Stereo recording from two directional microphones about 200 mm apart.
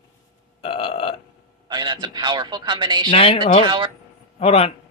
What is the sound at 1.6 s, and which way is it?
A man's voice, 25° right (ahead or behind).